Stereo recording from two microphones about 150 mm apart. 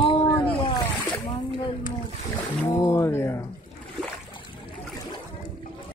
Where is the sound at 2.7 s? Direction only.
20° left (ahead or behind).